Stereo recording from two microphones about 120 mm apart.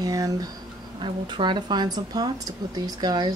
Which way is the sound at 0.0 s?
30° right (ahead or behind).